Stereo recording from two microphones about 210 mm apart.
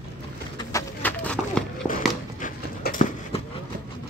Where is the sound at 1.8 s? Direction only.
40° left (ahead or behind).